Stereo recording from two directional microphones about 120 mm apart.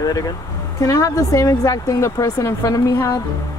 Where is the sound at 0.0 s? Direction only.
30° left (ahead or behind).